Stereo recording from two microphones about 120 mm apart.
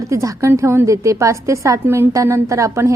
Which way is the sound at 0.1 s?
25° right (ahead or behind).